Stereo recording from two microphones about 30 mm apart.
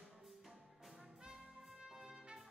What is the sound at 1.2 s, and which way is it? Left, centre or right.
Trumpet, right.